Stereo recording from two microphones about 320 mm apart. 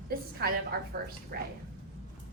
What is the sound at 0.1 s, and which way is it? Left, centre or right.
A woman's voice, right.